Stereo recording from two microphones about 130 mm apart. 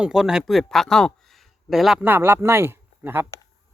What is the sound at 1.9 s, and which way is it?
Speech, 15° right (ahead or behind).